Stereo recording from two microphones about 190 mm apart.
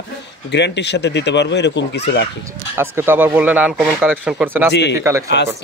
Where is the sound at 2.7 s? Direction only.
10° right (ahead or behind).